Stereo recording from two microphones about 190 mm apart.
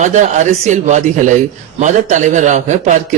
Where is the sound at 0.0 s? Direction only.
40° right (ahead or behind).